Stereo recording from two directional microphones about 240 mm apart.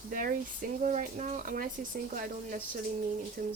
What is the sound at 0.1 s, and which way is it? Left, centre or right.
Speech, right.